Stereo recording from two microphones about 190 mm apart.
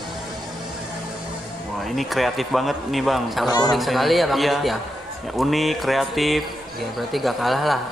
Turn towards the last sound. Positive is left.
turn(degrees=0)  # may be behind; listen again after turning